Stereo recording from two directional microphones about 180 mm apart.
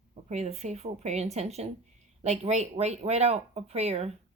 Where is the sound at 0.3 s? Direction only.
40° right (ahead or behind).